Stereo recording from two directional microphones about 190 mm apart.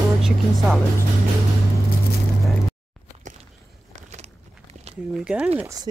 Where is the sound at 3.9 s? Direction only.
35° right (ahead or behind).